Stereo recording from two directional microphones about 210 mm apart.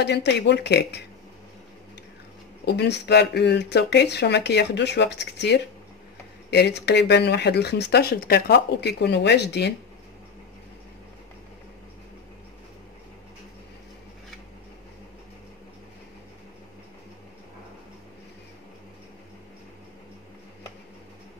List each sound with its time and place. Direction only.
0.0 s speech: 55° left (ahead or behind)
2.6 s speech: 55° left (ahead or behind)